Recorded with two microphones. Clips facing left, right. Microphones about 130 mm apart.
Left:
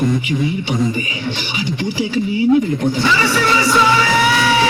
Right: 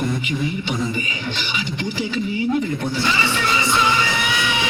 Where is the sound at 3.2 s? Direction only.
90° left.